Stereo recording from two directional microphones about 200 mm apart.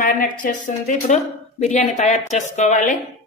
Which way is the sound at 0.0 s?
40° left (ahead or behind).